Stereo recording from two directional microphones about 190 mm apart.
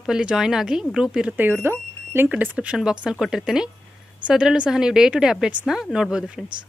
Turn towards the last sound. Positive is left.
turn(degrees=-5)  # may be behind; listen again after turning